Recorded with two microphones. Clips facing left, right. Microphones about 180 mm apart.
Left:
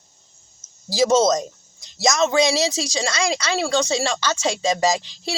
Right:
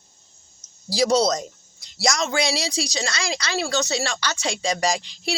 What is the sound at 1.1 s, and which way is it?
A man's voice, 20° left (ahead or behind).